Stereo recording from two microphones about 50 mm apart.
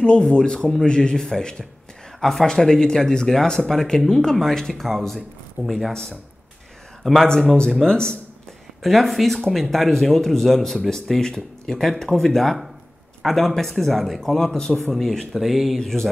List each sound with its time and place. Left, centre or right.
0.0 s speech: centre
7.0 s speech: centre
7.8 s speech: centre
8.8 s speech: centre